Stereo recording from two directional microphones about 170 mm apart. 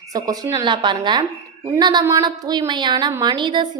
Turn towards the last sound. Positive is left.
turn(degrees=-25)  # may be behind; listen again after turning